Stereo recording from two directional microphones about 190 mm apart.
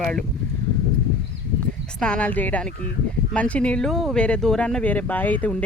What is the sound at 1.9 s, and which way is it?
A woman's voice, 5° left (ahead or behind).